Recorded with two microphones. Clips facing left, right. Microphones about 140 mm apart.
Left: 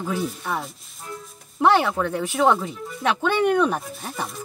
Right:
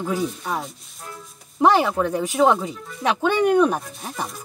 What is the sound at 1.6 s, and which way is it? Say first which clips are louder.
Speech: right 1 dB; 10° right (ahead or behind).